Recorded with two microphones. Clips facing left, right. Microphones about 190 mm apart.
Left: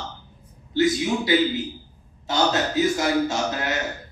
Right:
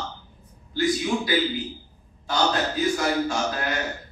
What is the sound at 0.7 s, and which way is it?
A man's voice, 25° left (ahead or behind).